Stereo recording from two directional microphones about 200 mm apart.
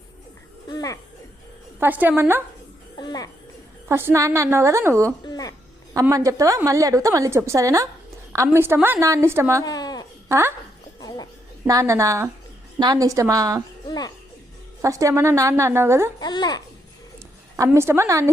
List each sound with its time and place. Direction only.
0.7 s music: 20° left (ahead or behind)
1.8 s a woman's voice: 10° right (ahead or behind)
3.0 s a child's voice: 20° left (ahead or behind)
3.8 s a woman's voice: 10° right (ahead or behind)
5.2 s a sound: 20° left (ahead or behind)
5.9 s a woman's voice: 15° right (ahead or behind)
9.6 s a sound: 20° left (ahead or behind)
10.2 s speech: 15° right (ahead or behind)
11.6 s a woman's voice: 15° right (ahead or behind)
13.8 s a child's voice: 20° left (ahead or behind)
14.8 s a woman's voice: 15° right (ahead or behind)
16.2 s a child's voice: 20° left (ahead or behind)
17.7 s a woman's voice: 10° right (ahead or behind)